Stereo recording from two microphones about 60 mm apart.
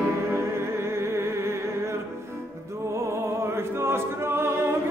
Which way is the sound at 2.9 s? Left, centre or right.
Right.